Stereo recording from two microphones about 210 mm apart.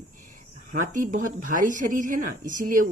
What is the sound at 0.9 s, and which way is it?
Speech, 40° right (ahead or behind).